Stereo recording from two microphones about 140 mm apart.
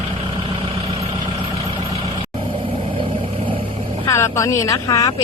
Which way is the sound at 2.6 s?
40° right (ahead or behind).